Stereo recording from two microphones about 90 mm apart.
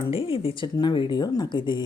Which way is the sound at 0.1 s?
90° left.